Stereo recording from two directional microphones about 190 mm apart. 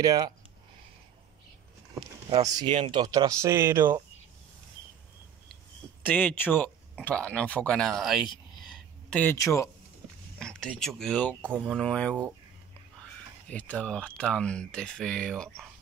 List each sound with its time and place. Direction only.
0.0 s speech: 20° right (ahead or behind)
2.0 s speech: 20° right (ahead or behind)
6.0 s speech: 10° left (ahead or behind)
9.1 s speech: 10° left (ahead or behind)
10.4 s speech: 5° left (ahead or behind)
11.4 s speech: 10° right (ahead or behind)
11.7 s speech: 5° left (ahead or behind)
13.5 s speech: 5° left (ahead or behind)